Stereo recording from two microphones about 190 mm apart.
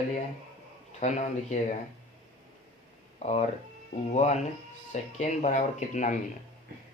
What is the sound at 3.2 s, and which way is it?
Speech, 35° left (ahead or behind).